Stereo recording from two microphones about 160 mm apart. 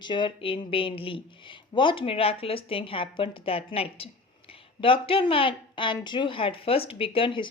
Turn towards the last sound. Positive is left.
turn(degrees=30)  # may be behind; listen again after turning